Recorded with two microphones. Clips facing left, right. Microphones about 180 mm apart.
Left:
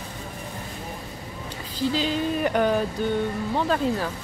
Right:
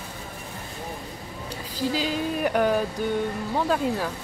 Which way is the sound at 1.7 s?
10° right (ahead or behind).